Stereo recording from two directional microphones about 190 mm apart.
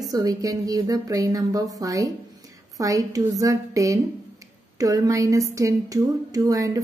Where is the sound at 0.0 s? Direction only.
20° right (ahead or behind).